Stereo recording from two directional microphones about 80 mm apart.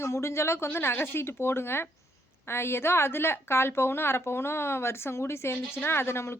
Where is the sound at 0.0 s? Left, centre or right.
Left.